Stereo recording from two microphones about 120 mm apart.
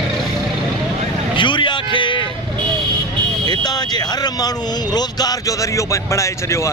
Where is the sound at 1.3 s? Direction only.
40° left (ahead or behind).